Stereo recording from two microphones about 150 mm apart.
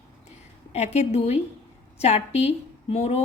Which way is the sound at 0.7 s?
45° left (ahead or behind).